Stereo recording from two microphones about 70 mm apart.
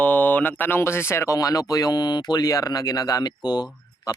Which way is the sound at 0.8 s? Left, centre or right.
Left.